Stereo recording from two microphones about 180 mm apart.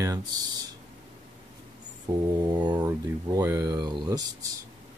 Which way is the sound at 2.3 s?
25° right (ahead or behind).